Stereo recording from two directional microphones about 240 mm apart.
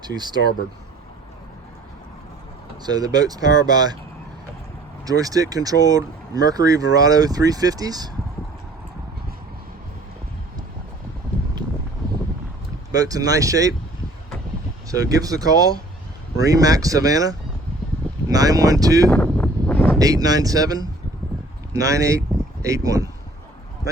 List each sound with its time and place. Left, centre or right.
0.0 s speech: centre
2.8 s speech: centre
5.0 s speech: centre
12.9 s speech: centre
15.1 s speech: centre
19.1 s a sound: centre
20.0 s speech: centre